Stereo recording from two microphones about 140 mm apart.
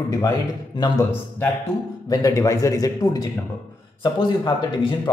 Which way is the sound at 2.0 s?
25° left (ahead or behind).